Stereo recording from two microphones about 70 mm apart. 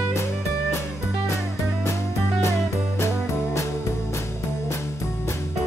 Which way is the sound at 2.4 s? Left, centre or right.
Left.